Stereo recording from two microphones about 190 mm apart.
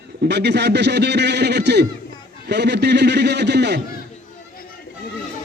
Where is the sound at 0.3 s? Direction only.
60° right (ahead or behind).